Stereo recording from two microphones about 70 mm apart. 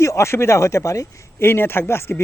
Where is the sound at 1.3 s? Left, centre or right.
Left.